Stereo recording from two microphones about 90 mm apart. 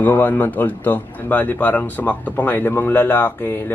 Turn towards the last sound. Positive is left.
turn(degrees=25)  # may be behind; listen again after turning